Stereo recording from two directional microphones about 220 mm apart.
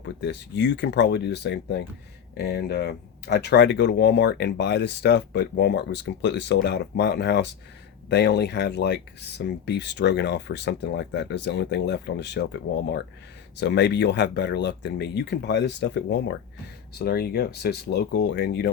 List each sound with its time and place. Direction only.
0.0 s speech: 50° left (ahead or behind)